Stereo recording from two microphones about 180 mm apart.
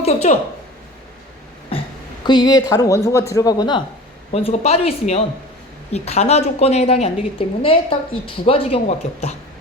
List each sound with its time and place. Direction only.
0.0 s a sound: 40° left (ahead or behind)
2.2 s speech: 25° left (ahead or behind)
4.3 s a woman's voice: 35° left (ahead or behind)